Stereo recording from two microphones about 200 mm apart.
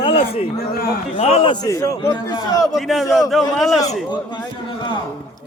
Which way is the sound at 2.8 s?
Centre (ahead or behind).